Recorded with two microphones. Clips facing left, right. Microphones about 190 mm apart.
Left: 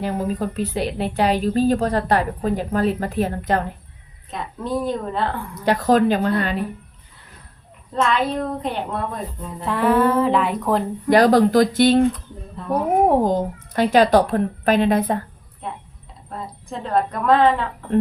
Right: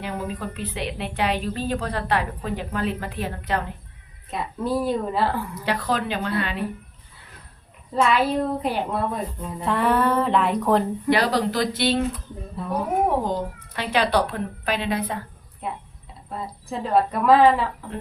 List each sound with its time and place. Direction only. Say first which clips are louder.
0.0 s speech: left 6 dB; 40° left (ahead or behind)
4.3 s speech: right 1 dB; 5° right (ahead or behind)
5.6 s speech: left 10 dB; 45° left (ahead or behind)
7.9 s speech: even; 5° right (ahead or behind)
11.1 s speech: left 8 dB; 45° left (ahead or behind)
12.6 s a woman's voice: left 3 dB; 5° right (ahead or behind)
13.1 s speech: left 6 dB; 45° left (ahead or behind)
15.6 s speech: even; 5° right (ahead or behind)